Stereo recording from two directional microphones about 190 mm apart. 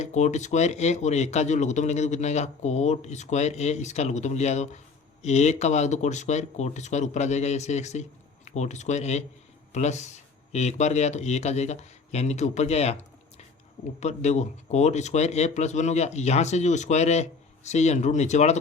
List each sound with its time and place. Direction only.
0.0 s speech: 35° left (ahead or behind)